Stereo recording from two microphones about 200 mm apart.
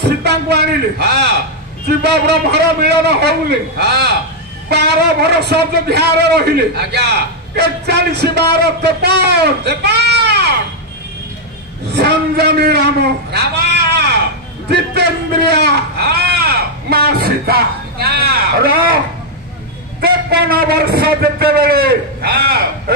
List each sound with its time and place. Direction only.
0.0 s a man's voice: 55° right (ahead or behind)
11.9 s a man's voice: 55° right (ahead or behind)
20.0 s a man's voice: 50° right (ahead or behind)